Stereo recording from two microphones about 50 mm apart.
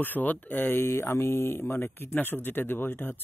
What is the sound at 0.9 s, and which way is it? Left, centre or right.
Speech, left.